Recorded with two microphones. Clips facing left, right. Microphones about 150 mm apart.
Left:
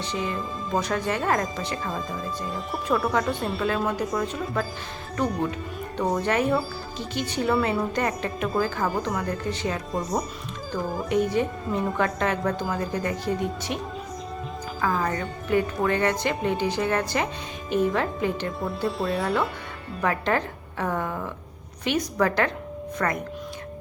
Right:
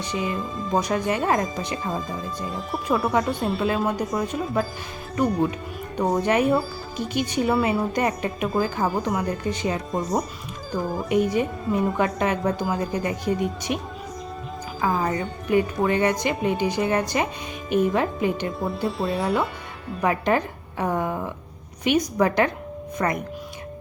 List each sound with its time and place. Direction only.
0.0 s speech: 15° right (ahead or behind)
2.5 s speech: centre (ahead or behind); by 13.7 s 15° right (ahead or behind)
14.8 s speech: 15° right (ahead or behind)
18.6 s speech: centre (ahead or behind)
20.0 s speech: 15° right (ahead or behind)